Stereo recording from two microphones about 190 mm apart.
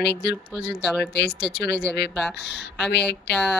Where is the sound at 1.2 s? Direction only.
60° left (ahead or behind).